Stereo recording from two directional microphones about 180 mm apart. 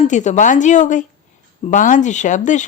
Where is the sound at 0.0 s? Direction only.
40° left (ahead or behind).